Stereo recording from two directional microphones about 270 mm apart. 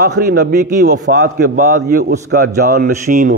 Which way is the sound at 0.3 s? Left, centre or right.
Right.